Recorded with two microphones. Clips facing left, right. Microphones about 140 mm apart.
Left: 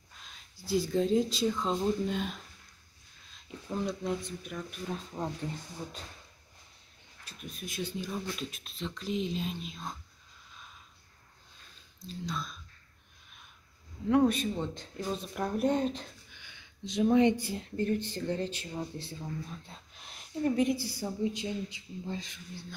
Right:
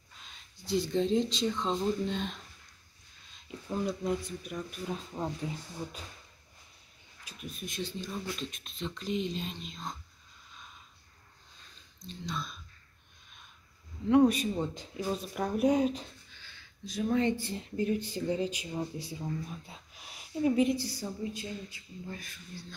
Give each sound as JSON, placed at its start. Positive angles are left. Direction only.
{"t": 0.2, "sound": "speech", "side_deg": 5}
{"t": 3.3, "sound": "speech", "side_deg": -5}
{"t": 7.2, "sound": "speech", "side_deg": 0}
{"t": 12.0, "sound": "speech", "side_deg": 0}
{"t": 14.0, "sound": "speech", "side_deg": -5}
{"t": 16.3, "sound": "a sound", "side_deg": 15}
{"t": 17.5, "sound": "speech", "side_deg": -5}
{"t": 21.0, "sound": "speech", "side_deg": 10}
{"t": 21.7, "sound": "a sound", "side_deg": 20}